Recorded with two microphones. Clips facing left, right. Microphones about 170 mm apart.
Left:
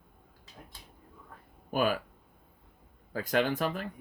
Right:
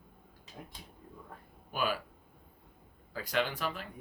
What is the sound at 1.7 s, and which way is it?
Speech, 50° left (ahead or behind).